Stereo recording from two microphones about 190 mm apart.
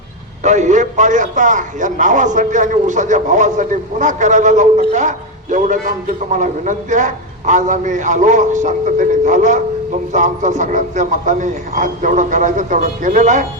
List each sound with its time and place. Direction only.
0.4 s a man's voice: 40° right (ahead or behind)